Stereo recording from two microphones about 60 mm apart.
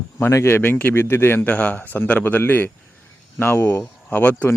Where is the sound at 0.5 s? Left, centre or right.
Left.